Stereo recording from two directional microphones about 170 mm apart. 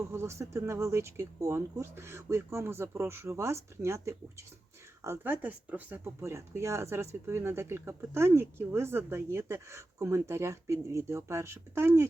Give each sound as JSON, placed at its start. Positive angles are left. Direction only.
{"t": 0.1, "sound": "speech", "side_deg": -15}